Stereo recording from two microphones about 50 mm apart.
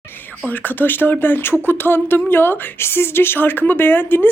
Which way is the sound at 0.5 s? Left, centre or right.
Left.